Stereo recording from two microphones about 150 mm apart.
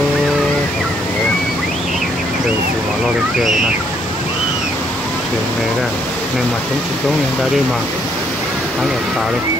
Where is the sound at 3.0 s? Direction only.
Centre (ahead or behind).